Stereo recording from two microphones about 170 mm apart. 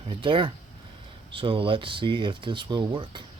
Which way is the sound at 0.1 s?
30° right (ahead or behind).